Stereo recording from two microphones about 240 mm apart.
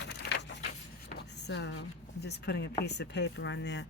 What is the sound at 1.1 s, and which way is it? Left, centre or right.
Speech, left.